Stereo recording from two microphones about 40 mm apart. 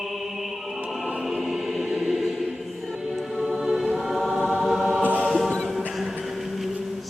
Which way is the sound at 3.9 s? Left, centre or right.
Centre.